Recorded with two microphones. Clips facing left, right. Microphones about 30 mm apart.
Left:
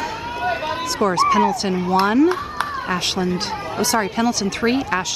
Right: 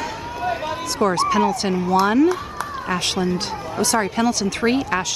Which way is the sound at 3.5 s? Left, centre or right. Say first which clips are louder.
Left 1 dB; left.